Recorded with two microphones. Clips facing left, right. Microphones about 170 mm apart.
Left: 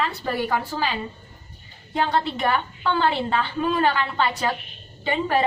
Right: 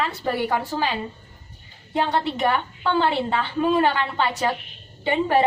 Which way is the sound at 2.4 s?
20° right (ahead or behind).